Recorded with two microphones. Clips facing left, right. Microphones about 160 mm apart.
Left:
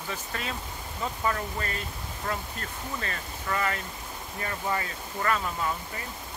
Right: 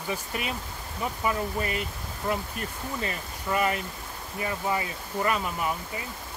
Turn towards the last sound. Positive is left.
turn(degrees=-15)  # may be behind; listen again after turning